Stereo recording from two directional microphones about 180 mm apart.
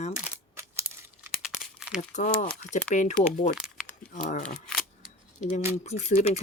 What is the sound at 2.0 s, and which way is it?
Speech, 45° left (ahead or behind).